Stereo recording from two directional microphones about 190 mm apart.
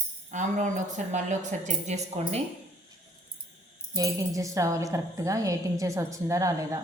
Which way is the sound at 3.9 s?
15° right (ahead or behind).